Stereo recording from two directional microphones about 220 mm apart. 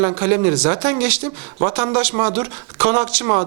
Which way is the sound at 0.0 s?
20° right (ahead or behind).